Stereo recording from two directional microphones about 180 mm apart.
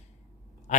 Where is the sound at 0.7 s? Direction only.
45° left (ahead or behind).